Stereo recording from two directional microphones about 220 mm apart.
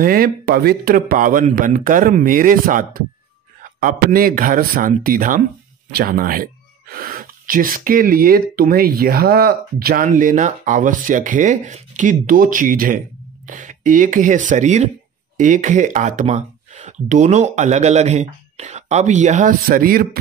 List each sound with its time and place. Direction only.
0.0 s speech: 40° right (ahead or behind)